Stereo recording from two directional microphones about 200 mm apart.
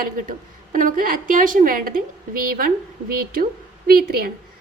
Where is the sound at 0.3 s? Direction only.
45° right (ahead or behind).